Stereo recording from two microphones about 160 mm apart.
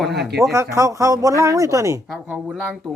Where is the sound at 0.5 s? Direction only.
20° right (ahead or behind).